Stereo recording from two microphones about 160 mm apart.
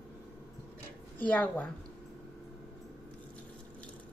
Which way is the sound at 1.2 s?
10° left (ahead or behind).